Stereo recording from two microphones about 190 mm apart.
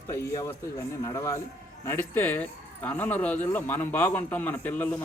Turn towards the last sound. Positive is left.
turn(degrees=10)  # may be behind; listen again after turning